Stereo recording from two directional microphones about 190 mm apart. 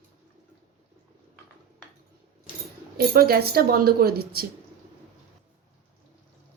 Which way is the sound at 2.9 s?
55° right (ahead or behind).